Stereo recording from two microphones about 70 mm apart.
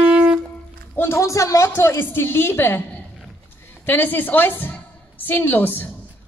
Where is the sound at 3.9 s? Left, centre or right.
Left.